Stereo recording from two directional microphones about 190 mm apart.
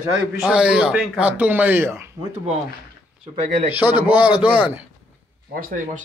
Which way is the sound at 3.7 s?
10° right (ahead or behind).